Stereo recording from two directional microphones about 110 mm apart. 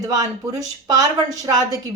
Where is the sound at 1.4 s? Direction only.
30° right (ahead or behind).